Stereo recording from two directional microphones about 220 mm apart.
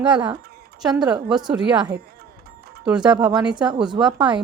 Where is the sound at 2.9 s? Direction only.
20° right (ahead or behind).